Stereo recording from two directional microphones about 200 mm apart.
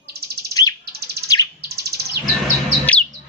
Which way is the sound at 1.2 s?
20° left (ahead or behind).